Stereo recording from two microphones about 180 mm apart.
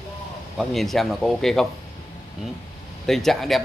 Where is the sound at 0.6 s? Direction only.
Centre (ahead or behind).